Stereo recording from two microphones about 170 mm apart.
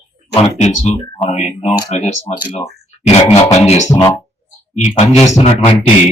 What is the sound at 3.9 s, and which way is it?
Speech, 20° left (ahead or behind).